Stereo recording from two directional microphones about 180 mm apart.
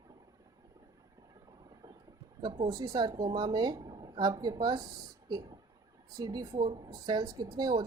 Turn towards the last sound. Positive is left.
turn(degrees=-20)  # may be behind; listen again after turning